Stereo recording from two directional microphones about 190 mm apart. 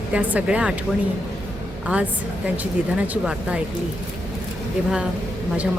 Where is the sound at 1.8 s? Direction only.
5° right (ahead or behind).